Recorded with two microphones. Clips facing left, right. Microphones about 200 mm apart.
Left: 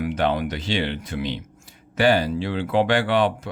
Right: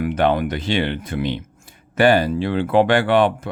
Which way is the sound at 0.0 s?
55° right (ahead or behind).